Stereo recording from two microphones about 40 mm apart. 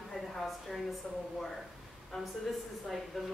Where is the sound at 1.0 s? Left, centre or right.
Left.